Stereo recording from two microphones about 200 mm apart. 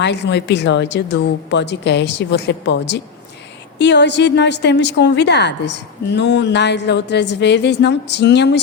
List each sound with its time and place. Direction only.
0.0 s a woman's voice: 60° left (ahead or behind)